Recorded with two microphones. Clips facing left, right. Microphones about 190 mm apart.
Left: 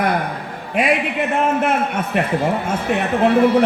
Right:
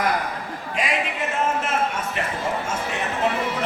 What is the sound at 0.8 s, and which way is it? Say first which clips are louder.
A man's voice: left 8 dB; 60° left (ahead or behind).